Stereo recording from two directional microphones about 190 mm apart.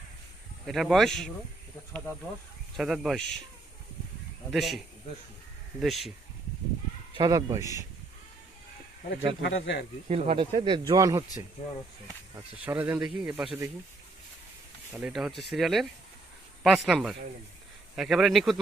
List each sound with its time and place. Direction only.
0.6 s a man's voice: centre (ahead or behind)
2.7 s a man's voice: centre (ahead or behind)
4.5 s a man's voice: centre (ahead or behind)
5.8 s a man's voice: centre (ahead or behind)
7.2 s speech: 20° right (ahead or behind)
9.4 s speech: 70° left (ahead or behind)
10.1 s speech: 30° right (ahead or behind)
12.6 s speech: 10° right (ahead or behind)
14.9 s a man's voice: 5° right (ahead or behind)